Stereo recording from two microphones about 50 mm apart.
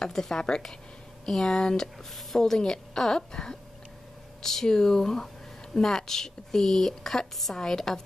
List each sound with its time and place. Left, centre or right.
0.0 s a woman's voice: centre